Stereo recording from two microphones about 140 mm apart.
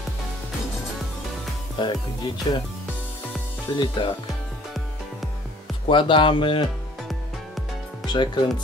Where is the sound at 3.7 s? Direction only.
35° left (ahead or behind).